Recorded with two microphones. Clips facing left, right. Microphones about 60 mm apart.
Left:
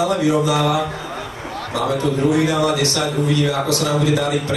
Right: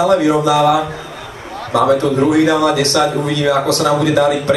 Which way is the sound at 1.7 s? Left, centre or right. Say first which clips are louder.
Right 7 dB; right.